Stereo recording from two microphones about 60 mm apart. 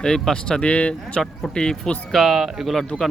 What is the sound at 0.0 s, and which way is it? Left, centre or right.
Speech, centre.